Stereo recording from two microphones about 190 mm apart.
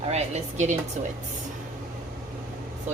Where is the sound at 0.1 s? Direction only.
35° right (ahead or behind).